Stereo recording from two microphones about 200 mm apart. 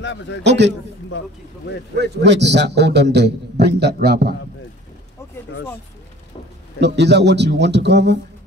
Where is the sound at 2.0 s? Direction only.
60° right (ahead or behind).